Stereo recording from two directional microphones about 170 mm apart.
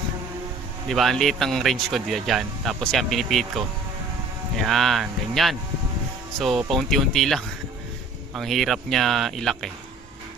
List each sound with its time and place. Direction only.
0.9 s speech: centre (ahead or behind)
4.5 s speech: centre (ahead or behind)